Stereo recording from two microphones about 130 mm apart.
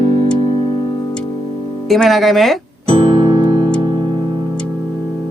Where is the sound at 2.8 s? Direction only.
45° right (ahead or behind).